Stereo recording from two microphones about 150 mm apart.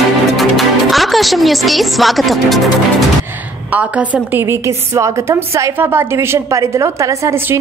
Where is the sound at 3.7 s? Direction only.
10° right (ahead or behind).